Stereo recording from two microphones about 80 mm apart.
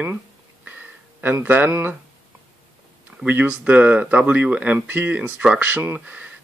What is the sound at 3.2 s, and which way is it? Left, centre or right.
Speech, right.